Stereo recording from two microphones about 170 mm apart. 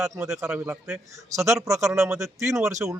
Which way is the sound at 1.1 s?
15° right (ahead or behind).